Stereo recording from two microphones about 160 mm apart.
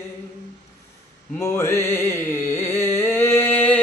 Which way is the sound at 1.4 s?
15° left (ahead or behind).